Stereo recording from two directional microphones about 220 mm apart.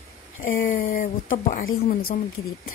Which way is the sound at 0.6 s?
35° left (ahead or behind).